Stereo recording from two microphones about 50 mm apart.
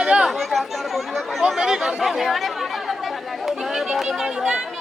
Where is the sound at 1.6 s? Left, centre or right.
Centre.